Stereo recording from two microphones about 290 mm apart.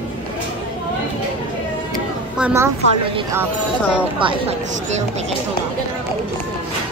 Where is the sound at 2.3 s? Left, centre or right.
Centre.